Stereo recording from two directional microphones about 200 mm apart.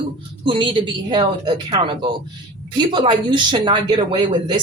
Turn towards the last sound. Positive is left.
turn(degrees=-25)  # may be behind; listen again after turning